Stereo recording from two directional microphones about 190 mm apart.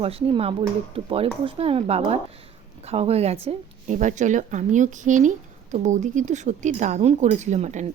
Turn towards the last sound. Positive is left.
turn(degrees=-40)  # may be behind; listen again after turning